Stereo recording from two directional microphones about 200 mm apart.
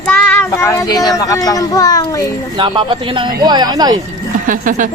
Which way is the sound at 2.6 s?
25° right (ahead or behind).